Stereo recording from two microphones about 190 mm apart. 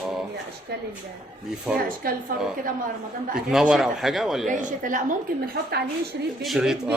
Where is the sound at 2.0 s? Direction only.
50° right (ahead or behind).